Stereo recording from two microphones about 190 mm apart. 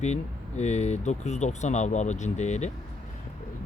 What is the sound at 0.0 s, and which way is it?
Speech, 35° left (ahead or behind).